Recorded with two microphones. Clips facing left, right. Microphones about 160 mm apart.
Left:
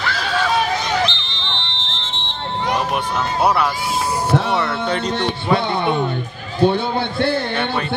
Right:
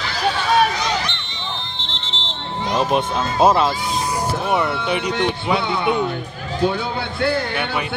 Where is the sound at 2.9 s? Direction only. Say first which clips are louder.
Right 1 dB; 25° right (ahead or behind).